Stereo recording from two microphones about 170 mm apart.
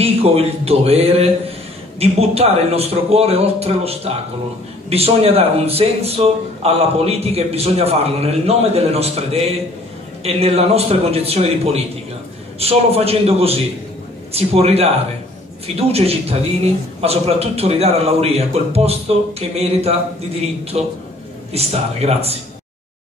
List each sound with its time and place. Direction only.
0.0 s a man's voice: 35° right (ahead or behind)